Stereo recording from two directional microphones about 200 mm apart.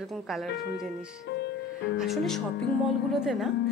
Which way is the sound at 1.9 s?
Centre (ahead or behind).